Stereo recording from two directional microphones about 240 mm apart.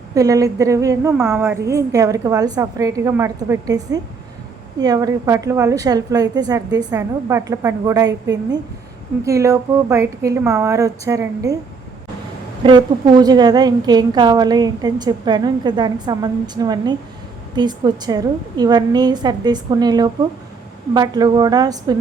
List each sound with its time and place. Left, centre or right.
0.1 s a woman's voice: centre
12.6 s a woman's voice: centre